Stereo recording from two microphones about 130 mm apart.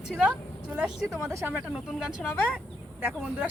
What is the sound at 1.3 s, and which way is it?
Speech, 20° right (ahead or behind).